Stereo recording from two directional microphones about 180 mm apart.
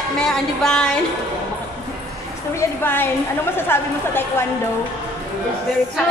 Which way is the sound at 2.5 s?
10° left (ahead or behind).